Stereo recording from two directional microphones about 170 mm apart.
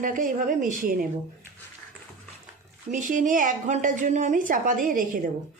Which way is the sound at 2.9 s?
50° right (ahead or behind).